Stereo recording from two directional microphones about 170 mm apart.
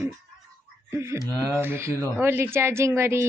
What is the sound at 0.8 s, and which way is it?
A woman's voice, 15° right (ahead or behind).